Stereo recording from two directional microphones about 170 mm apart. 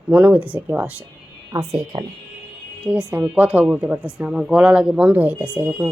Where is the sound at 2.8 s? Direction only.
5° right (ahead or behind).